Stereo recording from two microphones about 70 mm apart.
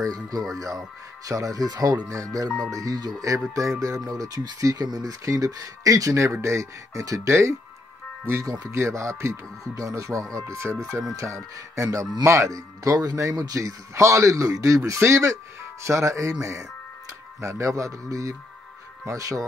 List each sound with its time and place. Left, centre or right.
0.0 s speech: right
3.3 s speech: right
7.2 s speech: right
8.7 s speech: right